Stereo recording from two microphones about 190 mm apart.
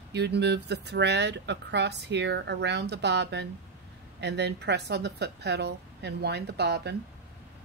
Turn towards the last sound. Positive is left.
turn(degrees=-60)  # may be behind; listen again after turning